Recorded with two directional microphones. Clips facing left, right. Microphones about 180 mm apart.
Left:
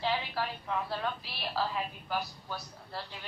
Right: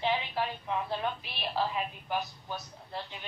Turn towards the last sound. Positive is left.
turn(degrees=-20)  # may be behind; listen again after turning